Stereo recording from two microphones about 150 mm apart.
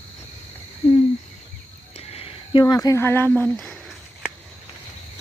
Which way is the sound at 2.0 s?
40° left (ahead or behind).